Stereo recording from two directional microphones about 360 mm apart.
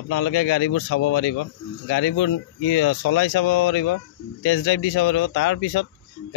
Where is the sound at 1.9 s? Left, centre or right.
Left.